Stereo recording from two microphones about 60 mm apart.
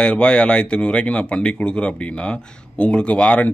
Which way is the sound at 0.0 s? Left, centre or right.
Centre.